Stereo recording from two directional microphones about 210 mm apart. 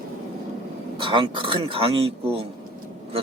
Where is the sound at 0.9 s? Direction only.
25° right (ahead or behind).